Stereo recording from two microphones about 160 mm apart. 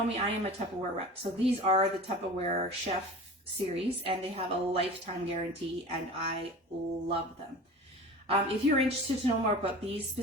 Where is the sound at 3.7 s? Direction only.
35° right (ahead or behind).